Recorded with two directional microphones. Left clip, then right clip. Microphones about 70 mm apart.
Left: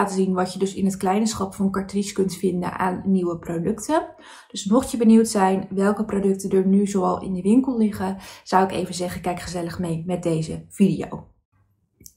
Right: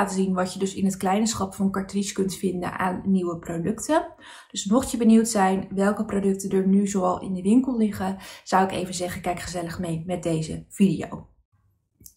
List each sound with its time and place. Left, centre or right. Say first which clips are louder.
0.0 s speech: left 3 dB; left